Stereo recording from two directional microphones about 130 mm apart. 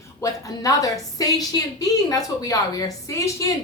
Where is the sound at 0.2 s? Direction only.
25° left (ahead or behind).